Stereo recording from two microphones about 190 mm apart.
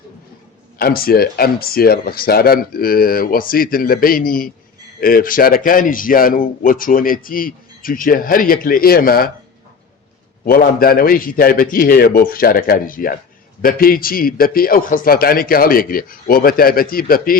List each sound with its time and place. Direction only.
0.8 s a man's voice: 50° left (ahead or behind)
10.4 s a man's voice: 50° left (ahead or behind)